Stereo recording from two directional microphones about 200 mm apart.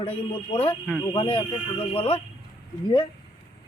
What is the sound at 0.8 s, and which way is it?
Speech, 5° left (ahead or behind).